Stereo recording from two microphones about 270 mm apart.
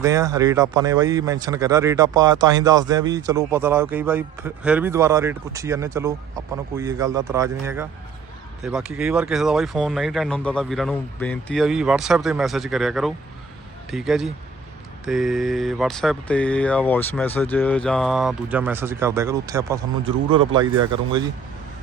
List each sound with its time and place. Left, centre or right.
0.0 s speech: centre